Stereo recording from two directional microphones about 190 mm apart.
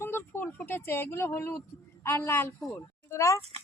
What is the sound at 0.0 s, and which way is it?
Speech, 10° left (ahead or behind).